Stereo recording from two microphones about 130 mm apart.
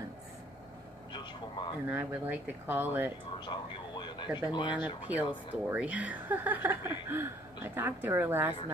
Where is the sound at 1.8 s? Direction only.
15° right (ahead or behind).